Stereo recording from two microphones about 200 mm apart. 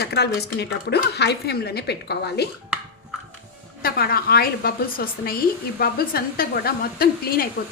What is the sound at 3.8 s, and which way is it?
A woman's voice, 50° left (ahead or behind).